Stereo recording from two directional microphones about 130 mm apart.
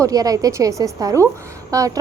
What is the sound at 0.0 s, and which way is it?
A woman's voice, 30° right (ahead or behind).